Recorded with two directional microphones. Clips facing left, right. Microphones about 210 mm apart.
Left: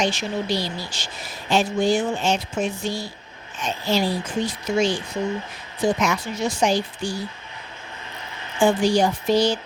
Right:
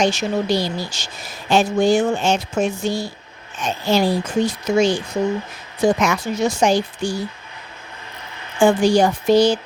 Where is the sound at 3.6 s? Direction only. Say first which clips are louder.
Right 4 dB; 75° right (ahead or behind).